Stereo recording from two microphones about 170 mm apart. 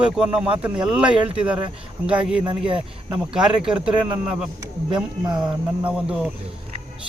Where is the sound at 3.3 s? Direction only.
5° right (ahead or behind).